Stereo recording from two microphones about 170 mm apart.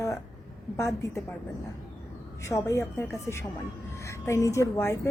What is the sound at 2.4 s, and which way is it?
A woman's voice, 15° left (ahead or behind).